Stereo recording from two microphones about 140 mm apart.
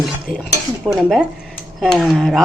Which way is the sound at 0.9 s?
30° right (ahead or behind).